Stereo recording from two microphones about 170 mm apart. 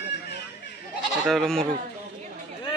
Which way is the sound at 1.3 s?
5° left (ahead or behind).